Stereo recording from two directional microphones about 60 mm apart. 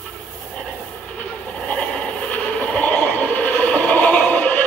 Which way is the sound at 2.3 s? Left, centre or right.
Left.